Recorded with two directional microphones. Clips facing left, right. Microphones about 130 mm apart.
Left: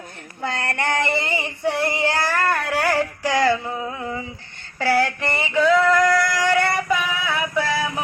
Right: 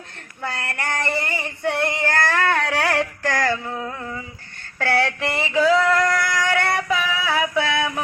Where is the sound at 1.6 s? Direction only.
5° left (ahead or behind).